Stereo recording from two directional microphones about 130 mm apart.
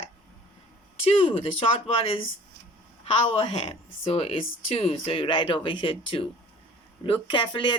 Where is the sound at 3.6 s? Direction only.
45° left (ahead or behind).